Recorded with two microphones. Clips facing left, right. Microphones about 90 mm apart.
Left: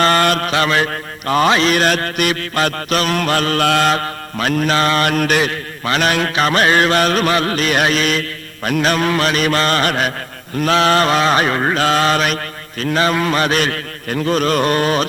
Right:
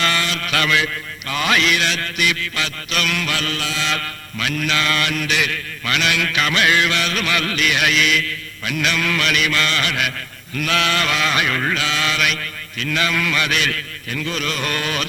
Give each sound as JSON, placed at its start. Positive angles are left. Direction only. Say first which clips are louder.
{"t": 0.0, "sound": "mantra", "louder": "left 8 dB", "side_deg": 45}
{"t": 0.5, "sound": "mantra", "louder": "left 4 dB", "side_deg": 35}
{"t": 0.9, "sound": "a man's voice", "louder": "left 8 dB", "side_deg": 40}
{"t": 1.5, "sound": "mantra", "louder": "left 3 dB", "side_deg": 35}
{"t": 3.9, "sound": "mantra", "louder": "left 6 dB", "side_deg": 35}